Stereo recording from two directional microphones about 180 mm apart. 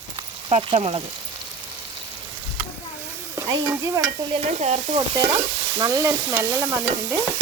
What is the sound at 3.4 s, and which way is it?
Stir, 15° right (ahead or behind).